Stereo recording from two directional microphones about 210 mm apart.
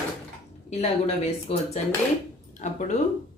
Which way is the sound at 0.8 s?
30° left (ahead or behind).